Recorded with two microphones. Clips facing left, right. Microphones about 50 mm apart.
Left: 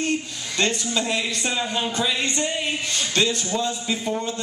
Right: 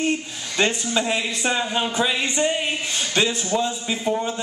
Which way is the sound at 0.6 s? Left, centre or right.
Centre.